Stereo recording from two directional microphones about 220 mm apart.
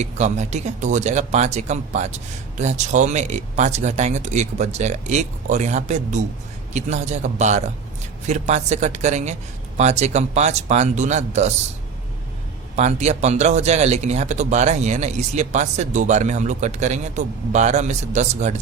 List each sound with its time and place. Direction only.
0.0 s speech: 30° right (ahead or behind)
12.7 s speech: 30° right (ahead or behind)